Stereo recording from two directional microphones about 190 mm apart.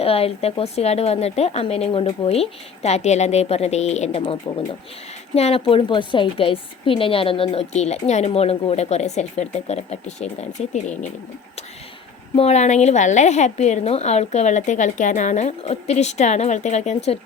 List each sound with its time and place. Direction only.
0.0 s a woman's voice: 30° left (ahead or behind)
12.4 s a woman's voice: 35° left (ahead or behind)